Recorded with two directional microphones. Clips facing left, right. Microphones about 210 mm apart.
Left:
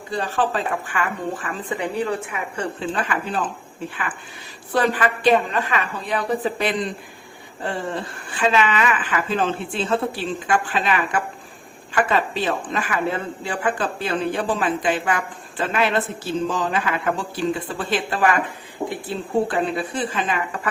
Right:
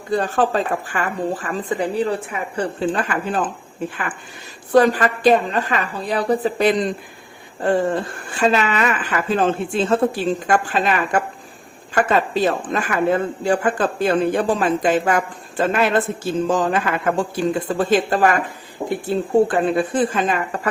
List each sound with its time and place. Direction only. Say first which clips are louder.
0.1 s speech: right 4 dB; 45° right (ahead or behind)
2.8 s speech: right 4 dB; 45° right (ahead or behind)
4.7 s speech: right 6 dB; 40° right (ahead or behind)